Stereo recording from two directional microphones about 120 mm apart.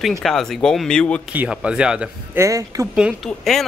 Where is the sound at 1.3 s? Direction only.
10° right (ahead or behind).